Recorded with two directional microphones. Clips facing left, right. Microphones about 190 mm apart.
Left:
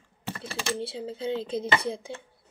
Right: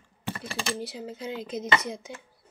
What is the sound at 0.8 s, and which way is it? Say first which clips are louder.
Speech: left 3 dB; 30° left (ahead or behind).